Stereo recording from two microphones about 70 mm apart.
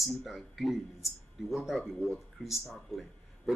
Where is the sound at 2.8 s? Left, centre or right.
Centre.